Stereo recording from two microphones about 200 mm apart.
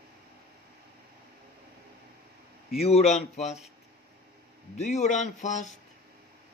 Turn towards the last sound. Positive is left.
turn(degrees=35)  # may be behind; listen again after turning